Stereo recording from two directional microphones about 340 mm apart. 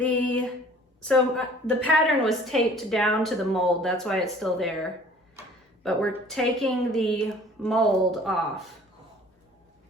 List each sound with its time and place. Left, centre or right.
0.0 s a woman's voice: centre
1.6 s a woman's voice: centre